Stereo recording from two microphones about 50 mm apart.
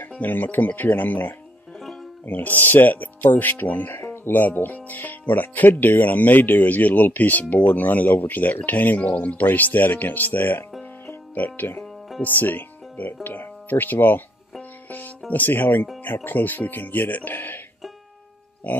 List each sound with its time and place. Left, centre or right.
0.2 s speech: left
4.0 s music: left
4.3 s speech: left
14.9 s music: left
16.3 s speech: left